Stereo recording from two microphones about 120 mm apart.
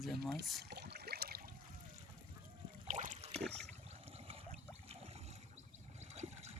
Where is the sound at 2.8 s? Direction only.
90° right.